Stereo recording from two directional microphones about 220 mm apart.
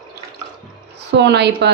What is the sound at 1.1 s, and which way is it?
Speech, 50° right (ahead or behind).